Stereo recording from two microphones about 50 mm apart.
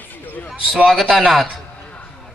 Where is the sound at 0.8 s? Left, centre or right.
Centre.